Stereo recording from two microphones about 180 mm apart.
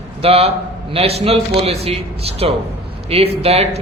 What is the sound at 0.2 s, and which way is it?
A man's voice, 35° right (ahead or behind).